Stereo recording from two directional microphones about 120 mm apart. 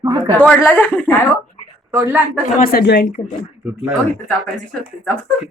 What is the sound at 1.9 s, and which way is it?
Speech, 25° right (ahead or behind).